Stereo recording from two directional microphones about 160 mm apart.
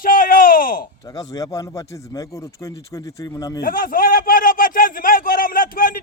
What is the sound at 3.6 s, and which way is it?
A man's voice, 65° left (ahead or behind).